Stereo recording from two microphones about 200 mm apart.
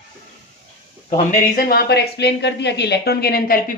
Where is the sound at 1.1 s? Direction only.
40° left (ahead or behind).